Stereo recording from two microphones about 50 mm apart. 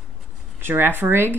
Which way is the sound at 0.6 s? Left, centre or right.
Right.